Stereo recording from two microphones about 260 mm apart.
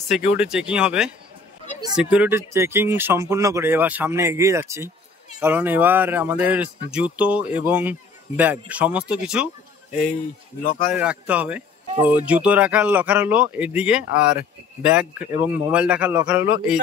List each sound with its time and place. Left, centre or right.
0.1 s speech: centre
10.6 s speech: left
10.9 s speech: centre